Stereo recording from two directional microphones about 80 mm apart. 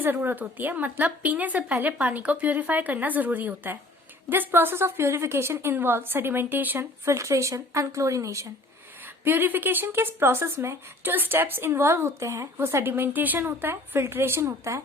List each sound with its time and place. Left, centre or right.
0.0 s a woman's voice: right
7.0 s speech: right
9.2 s a woman's voice: right